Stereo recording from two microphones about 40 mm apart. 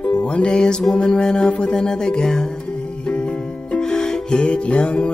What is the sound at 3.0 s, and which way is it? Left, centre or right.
Music, left.